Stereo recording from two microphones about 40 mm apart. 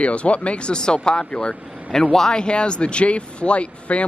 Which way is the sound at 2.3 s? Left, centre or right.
Left.